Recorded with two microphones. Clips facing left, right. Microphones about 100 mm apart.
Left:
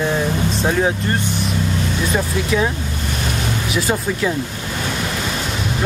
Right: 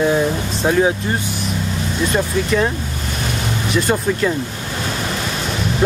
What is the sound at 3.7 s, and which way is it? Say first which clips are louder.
Speech: right 4 dB; centre (ahead or behind).